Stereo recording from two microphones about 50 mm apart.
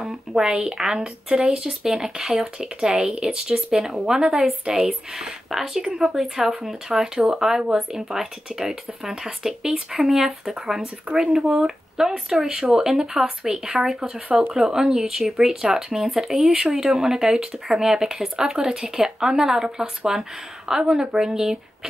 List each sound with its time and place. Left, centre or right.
0.3 s speech: centre
4.1 s speech: centre